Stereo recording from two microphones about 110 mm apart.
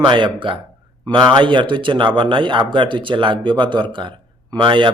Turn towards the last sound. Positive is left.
turn(degrees=-50)  # may be behind; listen again after turning